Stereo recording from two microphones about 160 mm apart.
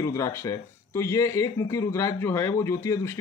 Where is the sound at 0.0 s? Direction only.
20° left (ahead or behind).